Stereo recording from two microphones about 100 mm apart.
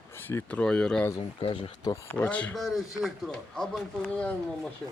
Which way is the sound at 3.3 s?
10° left (ahead or behind).